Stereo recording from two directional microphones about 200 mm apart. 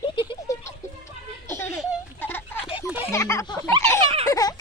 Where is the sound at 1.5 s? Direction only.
10° left (ahead or behind).